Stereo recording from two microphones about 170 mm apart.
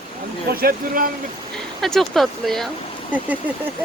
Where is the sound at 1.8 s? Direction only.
Centre (ahead or behind).